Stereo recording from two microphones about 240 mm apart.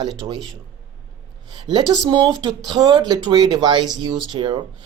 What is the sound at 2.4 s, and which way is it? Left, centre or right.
Speech, centre.